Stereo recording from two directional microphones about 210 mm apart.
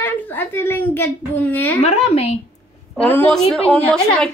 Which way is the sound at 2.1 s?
30° left (ahead or behind).